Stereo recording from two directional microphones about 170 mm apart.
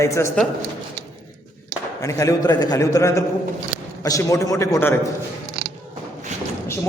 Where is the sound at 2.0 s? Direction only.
20° left (ahead or behind).